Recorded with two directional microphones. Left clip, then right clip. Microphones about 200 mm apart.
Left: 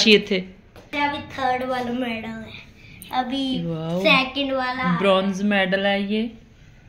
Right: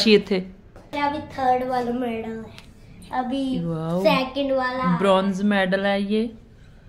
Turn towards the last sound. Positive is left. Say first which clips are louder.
# even
turn(degrees=0)  # may be behind; listen again after turning